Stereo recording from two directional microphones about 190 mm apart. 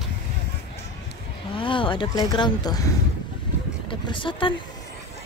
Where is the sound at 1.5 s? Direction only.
25° left (ahead or behind).